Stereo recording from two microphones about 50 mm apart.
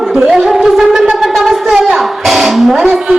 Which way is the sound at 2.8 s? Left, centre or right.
Centre.